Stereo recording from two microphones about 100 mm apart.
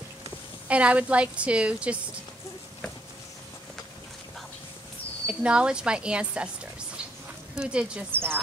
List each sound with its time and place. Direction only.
0.7 s a woman's voice: 15° right (ahead or behind)
5.2 s a woman's voice: 10° right (ahead or behind)
7.5 s a woman's voice: 10° right (ahead or behind)
8.1 s speech: 20° right (ahead or behind)